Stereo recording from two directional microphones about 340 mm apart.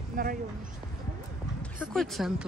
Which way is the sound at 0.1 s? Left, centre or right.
Right.